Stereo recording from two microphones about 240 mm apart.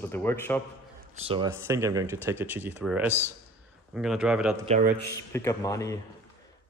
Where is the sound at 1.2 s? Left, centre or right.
Right; by 4.6 s centre.